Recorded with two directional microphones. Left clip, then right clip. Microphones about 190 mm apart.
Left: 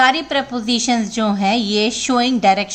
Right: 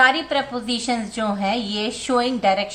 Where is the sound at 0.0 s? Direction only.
40° left (ahead or behind).